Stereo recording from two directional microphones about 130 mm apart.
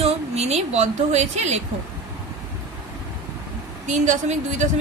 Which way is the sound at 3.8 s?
70° right (ahead or behind).